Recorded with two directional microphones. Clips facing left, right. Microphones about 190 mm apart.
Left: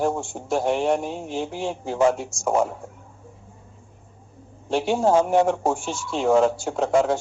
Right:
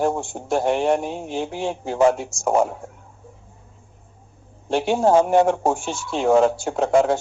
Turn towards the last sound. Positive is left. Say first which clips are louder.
# right 2 dB
turn(degrees=-60)  # may be behind; listen again after turning